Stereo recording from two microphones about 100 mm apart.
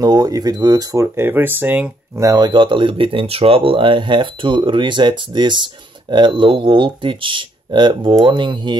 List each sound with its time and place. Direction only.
0.0 s speech: 40° right (ahead or behind)
1.0 s speech: 25° right (ahead or behind)
2.1 s speech: 40° right (ahead or behind)